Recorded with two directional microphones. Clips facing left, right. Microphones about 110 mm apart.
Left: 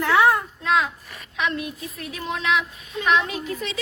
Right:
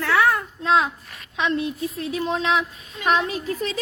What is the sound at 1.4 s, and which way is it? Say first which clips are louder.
A woman's voice: right 4 dB; 30° right (ahead or behind).